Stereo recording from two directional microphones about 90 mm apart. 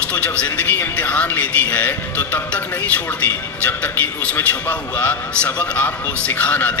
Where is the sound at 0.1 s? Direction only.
15° left (ahead or behind).